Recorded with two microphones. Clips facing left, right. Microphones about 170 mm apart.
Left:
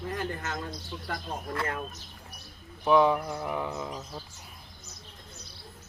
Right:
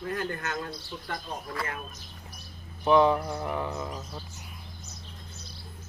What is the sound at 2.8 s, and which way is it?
Speech, 5° left (ahead or behind).